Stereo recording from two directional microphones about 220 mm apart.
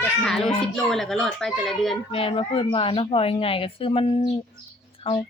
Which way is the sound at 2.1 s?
25° left (ahead or behind).